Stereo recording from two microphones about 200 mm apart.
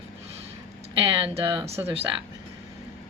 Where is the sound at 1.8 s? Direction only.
15° right (ahead or behind).